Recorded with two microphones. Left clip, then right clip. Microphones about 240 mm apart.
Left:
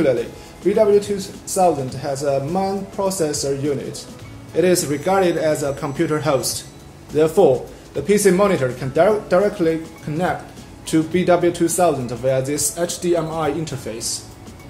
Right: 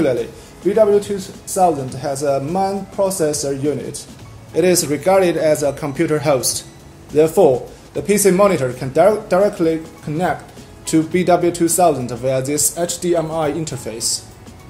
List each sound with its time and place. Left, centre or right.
1.5 s speech: right